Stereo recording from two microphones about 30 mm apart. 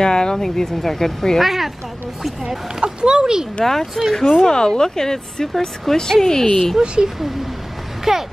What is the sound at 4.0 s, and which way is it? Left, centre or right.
Speech, centre.